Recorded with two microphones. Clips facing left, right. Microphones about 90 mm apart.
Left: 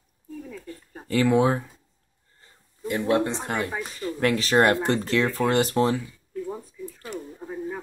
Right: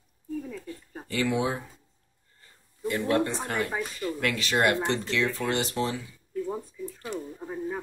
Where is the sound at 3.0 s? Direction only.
20° left (ahead or behind).